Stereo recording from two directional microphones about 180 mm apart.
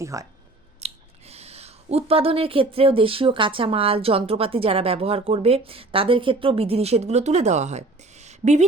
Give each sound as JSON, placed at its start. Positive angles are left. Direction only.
{"t": 0.0, "sound": "speech", "side_deg": -15}
{"t": 0.8, "sound": "speech", "side_deg": -35}